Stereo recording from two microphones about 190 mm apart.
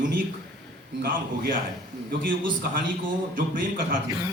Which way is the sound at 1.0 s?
50° right (ahead or behind).